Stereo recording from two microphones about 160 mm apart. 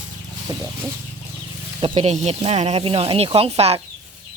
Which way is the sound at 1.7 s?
30° right (ahead or behind).